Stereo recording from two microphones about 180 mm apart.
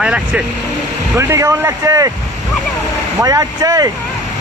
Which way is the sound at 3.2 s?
20° right (ahead or behind).